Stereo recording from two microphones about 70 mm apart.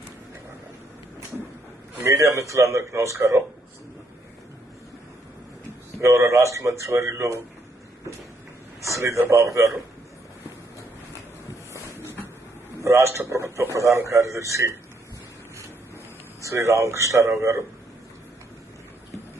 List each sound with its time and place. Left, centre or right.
2.0 s speech: right
6.0 s speech: right
8.8 s speech: right
12.8 s speech: right
16.4 s speech: right